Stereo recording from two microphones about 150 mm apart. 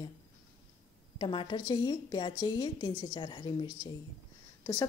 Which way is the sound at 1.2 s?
30° left (ahead or behind).